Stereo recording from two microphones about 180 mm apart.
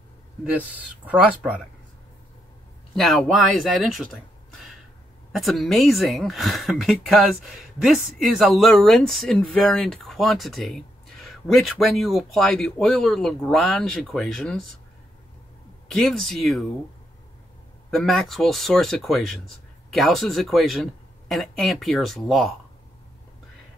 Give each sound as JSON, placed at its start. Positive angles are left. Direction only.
{"t": 0.5, "sound": "speech", "side_deg": -10}
{"t": 3.0, "sound": "speech", "side_deg": 0}
{"t": 5.3, "sound": "speech", "side_deg": 0}
{"t": 15.9, "sound": "speech", "side_deg": 0}
{"t": 17.9, "sound": "speech", "side_deg": 0}